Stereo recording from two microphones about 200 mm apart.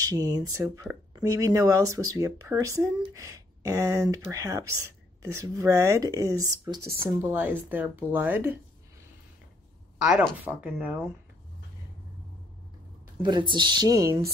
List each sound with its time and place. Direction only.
0.0 s speech: 20° right (ahead or behind)
9.9 s speech: 5° right (ahead or behind)
13.2 s speech: 20° right (ahead or behind)